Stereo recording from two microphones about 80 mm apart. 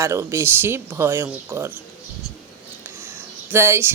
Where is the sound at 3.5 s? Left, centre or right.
Right.